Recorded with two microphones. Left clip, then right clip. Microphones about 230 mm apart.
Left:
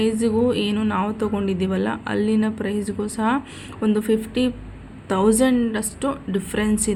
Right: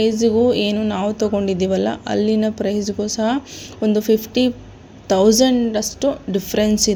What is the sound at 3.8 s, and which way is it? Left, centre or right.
A woman's voice, centre.